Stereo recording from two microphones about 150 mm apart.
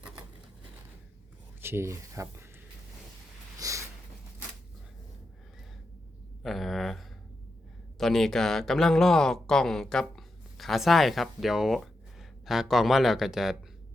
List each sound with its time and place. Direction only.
1.6 s speech: 15° right (ahead or behind)
3.6 s sniff: 20° right (ahead or behind)
6.4 s a sound: centre (ahead or behind)
7.9 s speech: centre (ahead or behind)